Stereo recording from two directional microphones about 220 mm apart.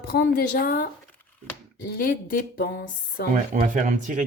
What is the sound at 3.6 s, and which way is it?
Speech, 35° right (ahead or behind).